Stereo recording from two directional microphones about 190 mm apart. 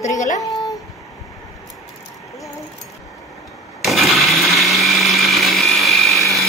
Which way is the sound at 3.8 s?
Centre (ahead or behind).